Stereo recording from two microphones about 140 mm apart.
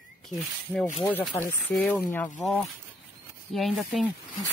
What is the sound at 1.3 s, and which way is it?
Speech, 15° left (ahead or behind).